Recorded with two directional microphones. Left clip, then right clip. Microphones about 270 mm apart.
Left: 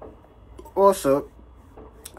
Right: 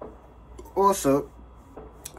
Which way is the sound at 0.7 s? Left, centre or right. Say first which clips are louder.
Left 3 dB; centre.